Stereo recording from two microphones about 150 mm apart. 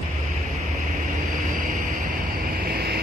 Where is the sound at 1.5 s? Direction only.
60° right (ahead or behind).